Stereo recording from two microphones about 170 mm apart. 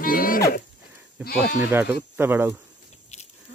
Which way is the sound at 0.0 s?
55° left (ahead or behind).